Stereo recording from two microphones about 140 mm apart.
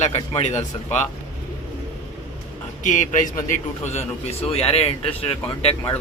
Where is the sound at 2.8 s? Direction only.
65° left (ahead or behind).